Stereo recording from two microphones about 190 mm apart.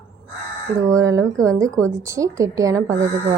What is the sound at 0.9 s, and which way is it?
A woman's voice, 15° right (ahead or behind).